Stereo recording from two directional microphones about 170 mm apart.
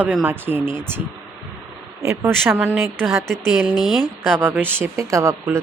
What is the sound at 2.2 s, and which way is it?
Speech, 15° right (ahead or behind).